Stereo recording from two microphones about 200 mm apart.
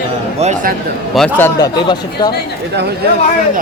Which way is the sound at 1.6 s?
20° left (ahead or behind).